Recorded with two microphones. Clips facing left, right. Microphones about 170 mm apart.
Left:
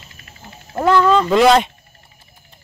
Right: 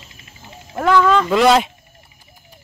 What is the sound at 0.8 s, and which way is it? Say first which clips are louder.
Speech: left 1 dB; 5° left (ahead or behind).